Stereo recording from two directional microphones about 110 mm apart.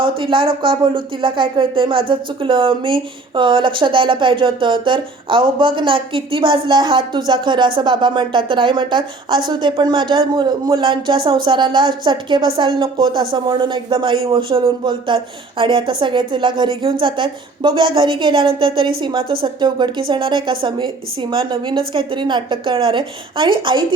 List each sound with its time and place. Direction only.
0.0 s speech: 50° right (ahead or behind)